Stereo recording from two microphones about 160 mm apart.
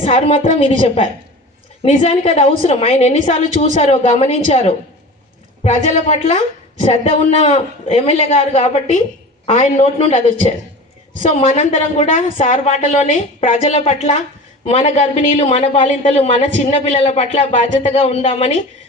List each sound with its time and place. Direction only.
0.0 s a woman's voice: 40° left (ahead or behind)
11.2 s a woman's voice: 45° left (ahead or behind)
13.7 s speech: 40° left (ahead or behind)